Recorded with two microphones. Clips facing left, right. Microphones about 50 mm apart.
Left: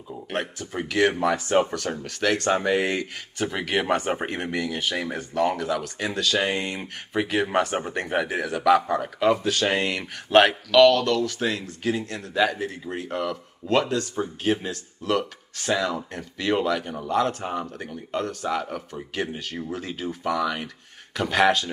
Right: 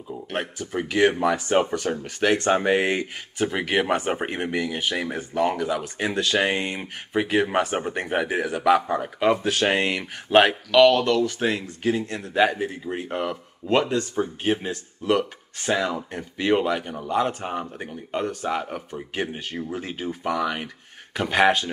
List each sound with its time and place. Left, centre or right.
0.1 s speech: centre
0.8 s speech: right
3.3 s speech: centre; by 6.9 s right
7.2 s speech: centre
9.3 s speech: right
10.4 s speech: centre; by 12.5 s right
12.5 s speech: centre